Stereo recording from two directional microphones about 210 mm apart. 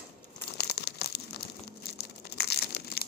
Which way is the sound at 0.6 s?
50° left (ahead or behind).